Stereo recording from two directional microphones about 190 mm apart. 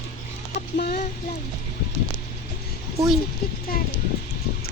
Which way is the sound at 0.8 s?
55° left (ahead or behind).